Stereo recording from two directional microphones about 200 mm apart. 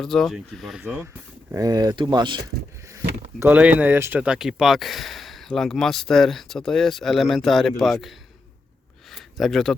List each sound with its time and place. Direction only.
0.0 s speech: centre (ahead or behind)
1.5 s speech: 20° right (ahead or behind)
3.4 s speech: 5° right (ahead or behind)
9.0 s a sound: centre (ahead or behind)